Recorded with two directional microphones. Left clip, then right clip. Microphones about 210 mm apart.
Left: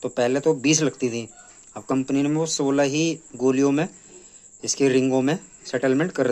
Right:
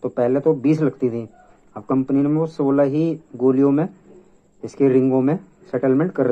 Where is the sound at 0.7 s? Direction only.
25° left (ahead or behind).